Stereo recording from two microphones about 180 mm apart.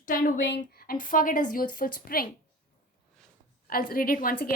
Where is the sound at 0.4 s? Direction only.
65° left (ahead or behind).